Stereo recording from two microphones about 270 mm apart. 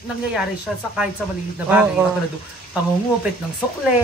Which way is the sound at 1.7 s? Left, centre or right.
Centre.